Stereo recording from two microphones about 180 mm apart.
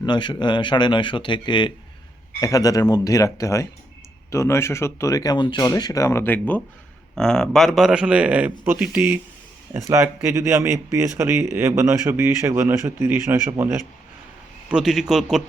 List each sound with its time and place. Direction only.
0.0 s speech: 25° left (ahead or behind); by 9.1 s 5° right (ahead or behind)
9.7 s speech: 20° right (ahead or behind)
14.7 s a man's voice: 5° right (ahead or behind)